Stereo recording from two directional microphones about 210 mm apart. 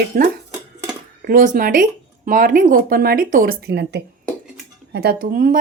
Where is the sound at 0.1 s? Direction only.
45° right (ahead or behind).